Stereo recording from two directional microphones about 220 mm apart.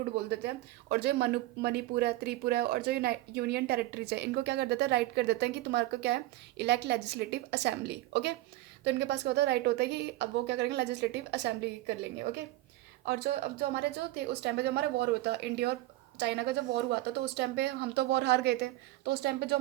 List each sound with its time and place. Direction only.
0.3 s speech: 50° right (ahead or behind)
13.1 s speech: 45° right (ahead or behind)